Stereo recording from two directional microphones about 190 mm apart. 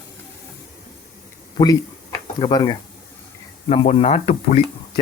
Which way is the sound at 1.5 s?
20° left (ahead or behind).